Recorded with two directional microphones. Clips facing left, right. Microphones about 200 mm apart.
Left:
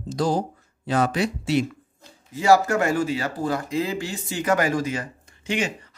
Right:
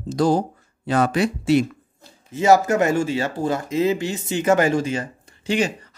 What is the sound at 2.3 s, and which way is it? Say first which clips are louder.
Speech: right 2 dB; 20° right (ahead or behind).